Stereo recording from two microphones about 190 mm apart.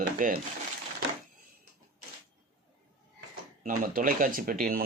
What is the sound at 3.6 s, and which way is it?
Speech, 45° right (ahead or behind).